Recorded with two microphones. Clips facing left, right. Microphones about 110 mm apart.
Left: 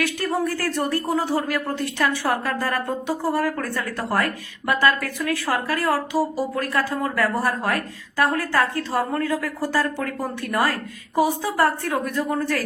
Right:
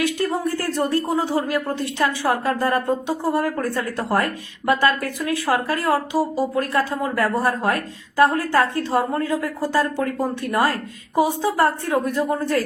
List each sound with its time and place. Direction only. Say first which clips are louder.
0.0 s speech: right 2 dB; 20° right (ahead or behind)